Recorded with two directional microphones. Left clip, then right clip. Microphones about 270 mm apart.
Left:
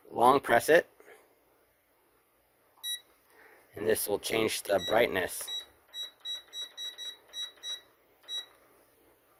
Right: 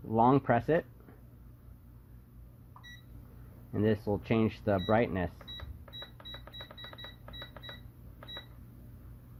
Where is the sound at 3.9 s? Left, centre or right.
Left.